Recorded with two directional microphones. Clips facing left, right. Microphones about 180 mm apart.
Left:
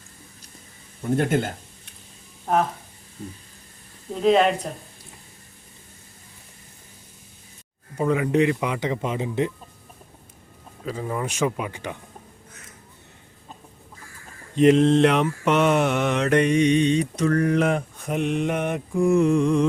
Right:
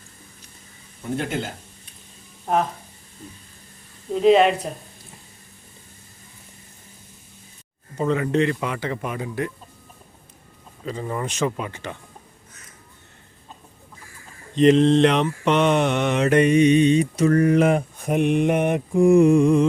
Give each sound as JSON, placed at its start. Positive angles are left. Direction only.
{"t": 1.1, "sound": "speech", "side_deg": 50}
{"t": 4.1, "sound": "mantra", "side_deg": 0}
{"t": 7.9, "sound": "speech", "side_deg": 10}
{"t": 10.8, "sound": "speech", "side_deg": 5}
{"t": 14.5, "sound": "mantra", "side_deg": 5}